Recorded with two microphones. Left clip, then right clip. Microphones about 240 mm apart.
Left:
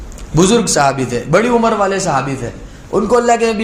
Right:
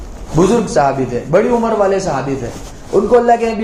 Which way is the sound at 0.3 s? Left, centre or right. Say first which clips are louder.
Even; left.